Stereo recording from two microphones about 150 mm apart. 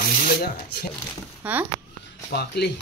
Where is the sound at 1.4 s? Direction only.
10° right (ahead or behind).